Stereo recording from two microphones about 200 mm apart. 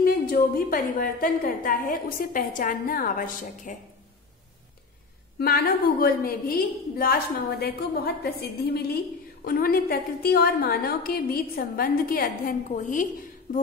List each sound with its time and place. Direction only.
0.0 s a woman's voice: 45° left (ahead or behind)
5.4 s a woman's voice: 50° left (ahead or behind)